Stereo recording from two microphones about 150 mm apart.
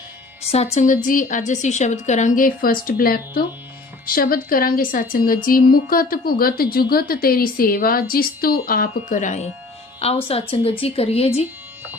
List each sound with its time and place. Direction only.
0.5 s a woman's voice: 45° left (ahead or behind)
1.0 s a woman's voice: 60° left (ahead or behind)
10.2 s speech: 40° left (ahead or behind)